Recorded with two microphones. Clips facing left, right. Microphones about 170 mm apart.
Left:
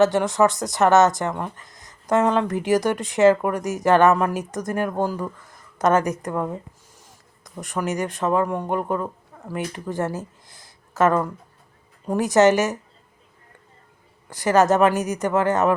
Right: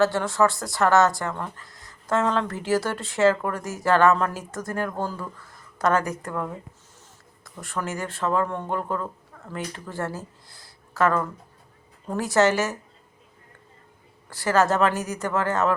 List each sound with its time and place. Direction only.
0.0 s speech: 20° left (ahead or behind)
14.3 s speech: 20° left (ahead or behind)